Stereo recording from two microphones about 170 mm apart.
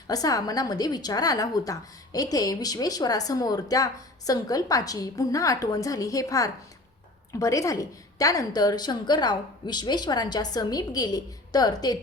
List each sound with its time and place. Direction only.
0.1 s a woman's voice: 20° left (ahead or behind)